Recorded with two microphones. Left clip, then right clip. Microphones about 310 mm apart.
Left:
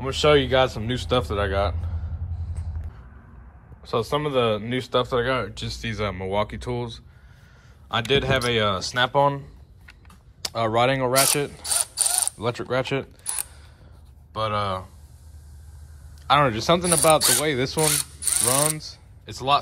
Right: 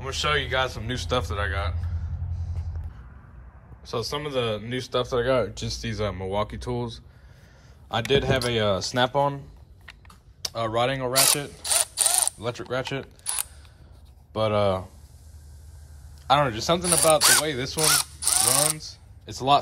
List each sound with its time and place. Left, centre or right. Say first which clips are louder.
0.0 s speech: left 6 dB; centre
3.9 s speech: left 5 dB; centre
11.2 s mechanisms: left 1 dB; centre
14.3 s speech: right 2 dB; right
16.3 s speech: left 3 dB; centre
17.2 s speech: right 1 dB; centre